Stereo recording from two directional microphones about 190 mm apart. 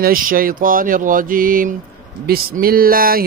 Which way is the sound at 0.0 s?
50° right (ahead or behind).